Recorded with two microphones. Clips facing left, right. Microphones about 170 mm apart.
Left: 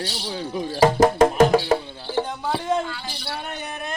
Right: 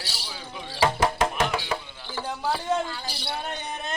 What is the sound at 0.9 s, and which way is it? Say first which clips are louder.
Music: left 8 dB; 45° left (ahead or behind).